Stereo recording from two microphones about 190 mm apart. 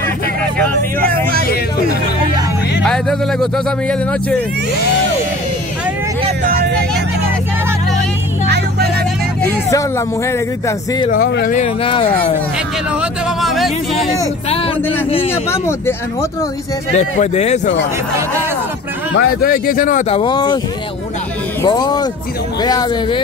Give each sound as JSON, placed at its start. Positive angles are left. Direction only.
{"t": 2.8, "sound": "speech", "side_deg": 5}
{"t": 8.5, "sound": "vehicle", "side_deg": -60}
{"t": 9.4, "sound": "speech", "side_deg": 15}
{"t": 11.1, "sound": "speech", "side_deg": 55}
{"t": 11.5, "sound": "speech", "side_deg": 30}
{"t": 13.0, "sound": "a sound", "side_deg": 0}
{"t": 14.5, "sound": "a man's voice", "side_deg": 30}
{"t": 16.9, "sound": "speech", "side_deg": 35}
{"t": 19.1, "sound": "speech", "side_deg": 50}
{"t": 20.1, "sound": "speech", "side_deg": 25}
{"t": 21.6, "sound": "speech", "side_deg": 20}